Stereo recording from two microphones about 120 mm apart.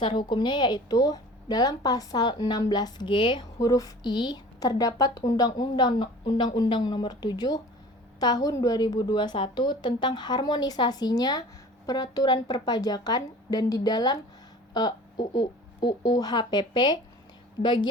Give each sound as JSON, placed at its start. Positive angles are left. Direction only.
{"t": 0.0, "sound": "a woman's voice", "side_deg": 40}
{"t": 3.6, "sound": "a woman's voice", "side_deg": 30}